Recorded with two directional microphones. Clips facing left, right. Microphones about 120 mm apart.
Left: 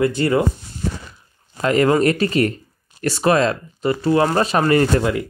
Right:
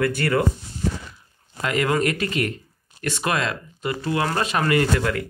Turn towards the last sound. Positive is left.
turn(degrees=20)  # may be behind; listen again after turning